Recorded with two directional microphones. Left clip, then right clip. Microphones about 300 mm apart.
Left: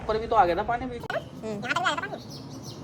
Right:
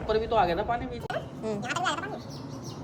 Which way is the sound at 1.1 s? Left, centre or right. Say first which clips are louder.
Right 1 dB; centre.